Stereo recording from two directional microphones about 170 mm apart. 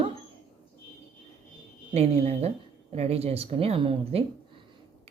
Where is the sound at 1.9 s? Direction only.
40° right (ahead or behind).